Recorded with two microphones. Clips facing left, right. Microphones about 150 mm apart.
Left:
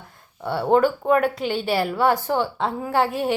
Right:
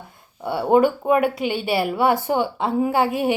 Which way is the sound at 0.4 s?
5° right (ahead or behind).